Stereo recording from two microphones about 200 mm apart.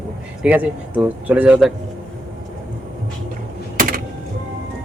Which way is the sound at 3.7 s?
45° right (ahead or behind).